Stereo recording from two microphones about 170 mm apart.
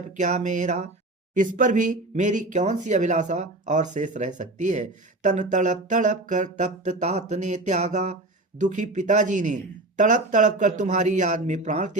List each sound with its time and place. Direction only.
0.2 s speech: 45° right (ahead or behind)